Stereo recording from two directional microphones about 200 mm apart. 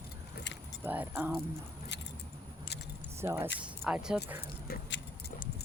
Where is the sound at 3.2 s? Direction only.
10° right (ahead or behind).